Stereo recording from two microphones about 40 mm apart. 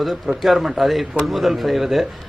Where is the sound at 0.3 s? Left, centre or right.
Centre.